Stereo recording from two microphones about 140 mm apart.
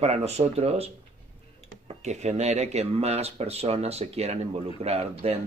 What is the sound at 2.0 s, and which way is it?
Speech, 55° right (ahead or behind).